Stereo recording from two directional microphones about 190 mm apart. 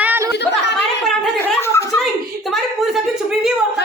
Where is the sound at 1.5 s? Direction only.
15° left (ahead or behind).